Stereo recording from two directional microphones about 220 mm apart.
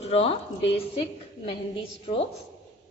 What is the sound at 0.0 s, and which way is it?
A woman's voice, 25° left (ahead or behind).